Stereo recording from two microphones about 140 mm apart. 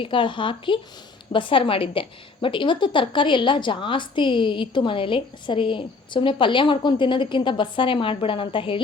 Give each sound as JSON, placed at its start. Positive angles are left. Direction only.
{"t": 0.0, "sound": "a woman's voice", "side_deg": 35}